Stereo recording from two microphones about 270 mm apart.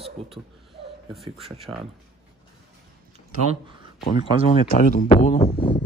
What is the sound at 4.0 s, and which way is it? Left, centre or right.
Speech, left.